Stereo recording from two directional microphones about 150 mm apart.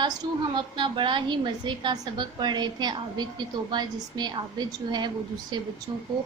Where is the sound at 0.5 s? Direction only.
30° right (ahead or behind).